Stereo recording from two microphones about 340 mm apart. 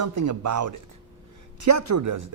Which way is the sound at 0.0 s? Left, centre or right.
Right.